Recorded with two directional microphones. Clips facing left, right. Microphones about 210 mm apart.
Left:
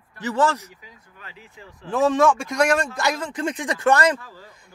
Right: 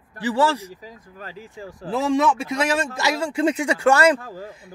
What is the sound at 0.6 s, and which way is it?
Speech, 35° right (ahead or behind).